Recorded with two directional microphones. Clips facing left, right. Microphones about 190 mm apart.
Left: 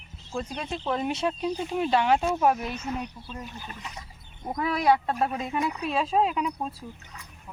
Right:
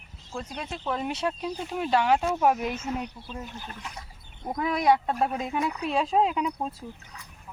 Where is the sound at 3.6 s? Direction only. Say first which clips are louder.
Even; 10° left (ahead or behind).